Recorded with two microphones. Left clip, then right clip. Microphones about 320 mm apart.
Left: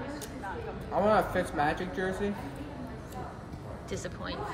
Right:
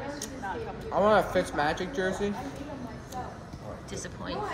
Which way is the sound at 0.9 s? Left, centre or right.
Centre.